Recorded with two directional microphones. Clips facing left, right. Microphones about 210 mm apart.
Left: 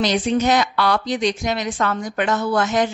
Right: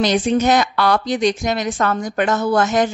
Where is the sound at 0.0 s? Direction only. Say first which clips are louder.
Right 2 dB; 50° right (ahead or behind).